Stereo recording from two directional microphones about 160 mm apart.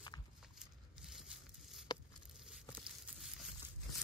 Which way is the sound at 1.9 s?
25° left (ahead or behind).